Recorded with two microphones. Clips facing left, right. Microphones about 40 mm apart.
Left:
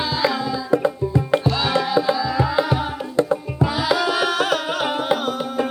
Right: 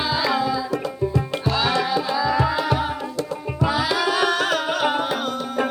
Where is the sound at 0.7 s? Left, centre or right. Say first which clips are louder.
Left 4 dB; left.